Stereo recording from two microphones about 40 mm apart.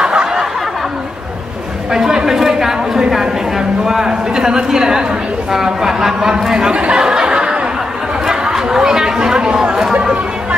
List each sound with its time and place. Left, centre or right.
0.0 s snicker: right
1.9 s a sound: centre
5.5 s speech: centre
8.3 s chatter: centre